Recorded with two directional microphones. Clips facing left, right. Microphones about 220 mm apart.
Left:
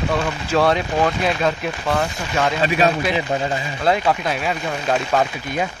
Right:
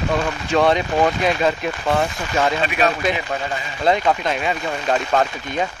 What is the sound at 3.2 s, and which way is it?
Speech, 35° left (ahead or behind).